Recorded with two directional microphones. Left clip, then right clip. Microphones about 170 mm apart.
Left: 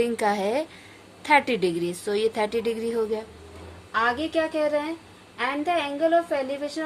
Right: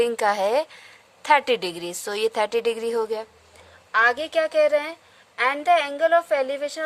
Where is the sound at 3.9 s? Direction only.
65° right (ahead or behind).